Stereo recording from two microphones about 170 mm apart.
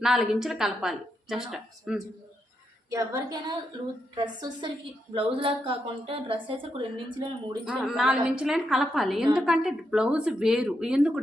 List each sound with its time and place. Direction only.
0.0 s a woman's voice: centre (ahead or behind)
2.9 s a woman's voice: 20° right (ahead or behind)
7.6 s a woman's voice: 5° right (ahead or behind)